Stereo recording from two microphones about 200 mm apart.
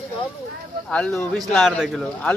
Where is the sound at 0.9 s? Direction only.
5° left (ahead or behind).